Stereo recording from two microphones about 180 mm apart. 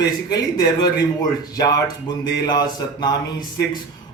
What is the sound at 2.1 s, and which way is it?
A man's voice, 20° left (ahead or behind).